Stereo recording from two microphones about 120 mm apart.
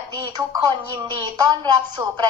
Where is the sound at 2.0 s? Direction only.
15° right (ahead or behind).